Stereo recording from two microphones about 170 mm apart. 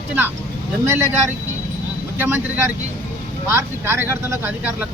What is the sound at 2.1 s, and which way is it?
Speech, 10° right (ahead or behind).